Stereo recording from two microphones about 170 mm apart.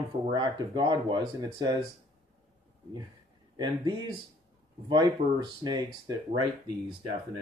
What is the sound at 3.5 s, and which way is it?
Speech, 25° right (ahead or behind).